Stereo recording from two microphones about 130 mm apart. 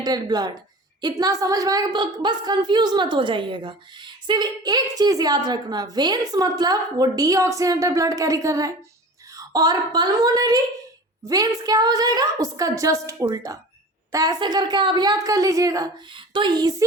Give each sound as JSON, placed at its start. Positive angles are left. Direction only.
{"t": 0.0, "sound": "a woman's voice", "side_deg": -30}
{"t": 16.0, "sound": "a woman's voice", "side_deg": -40}